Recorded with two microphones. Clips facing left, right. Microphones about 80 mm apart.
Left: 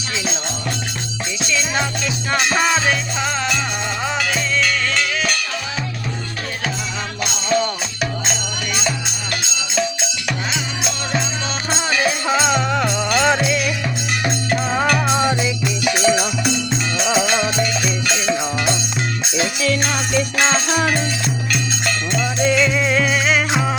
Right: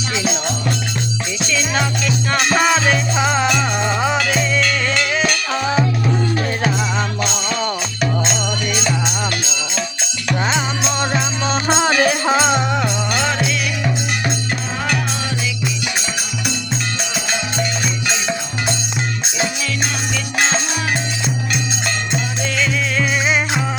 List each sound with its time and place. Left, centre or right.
1.5 s music: centre
3.2 s music: centre
11.8 s music: right
12.2 s music: right
12.7 s music: centre
13.2 s music: centre
14.9 s music: left
18.1 s music: centre
20.1 s music: left
21.5 s music: centre
22.4 s music: centre